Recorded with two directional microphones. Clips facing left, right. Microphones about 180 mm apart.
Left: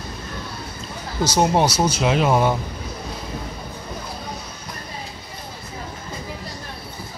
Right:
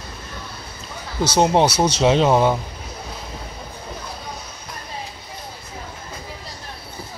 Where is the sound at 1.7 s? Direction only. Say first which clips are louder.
Right 2 dB; 80° right.